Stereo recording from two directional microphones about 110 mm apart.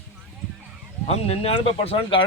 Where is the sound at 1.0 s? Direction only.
70° left (ahead or behind).